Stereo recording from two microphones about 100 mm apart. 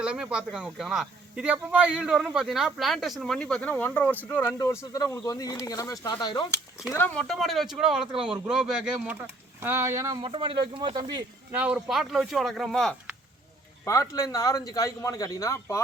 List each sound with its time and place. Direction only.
0.0 s speech: 10° right (ahead or behind); by 6.5 s 45° left (ahead or behind)
7.1 s speech: 5° left (ahead or behind)
8.0 s speech: 60° right (ahead or behind)
8.3 s speech: 5° right (ahead or behind)
9.6 s speech: 25° right (ahead or behind)
10.2 s speech: 55° right (ahead or behind)
11.5 s speech: 15° right (ahead or behind)
11.9 s speech: centre (ahead or behind)
13.8 s speech: 30° left (ahead or behind)